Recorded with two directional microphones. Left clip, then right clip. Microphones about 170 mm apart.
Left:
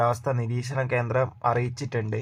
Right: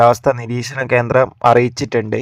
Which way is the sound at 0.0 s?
55° right (ahead or behind).